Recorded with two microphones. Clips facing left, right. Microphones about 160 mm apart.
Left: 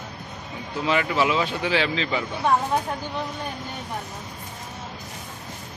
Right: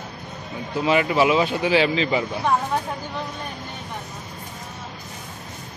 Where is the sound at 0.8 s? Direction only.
15° right (ahead or behind).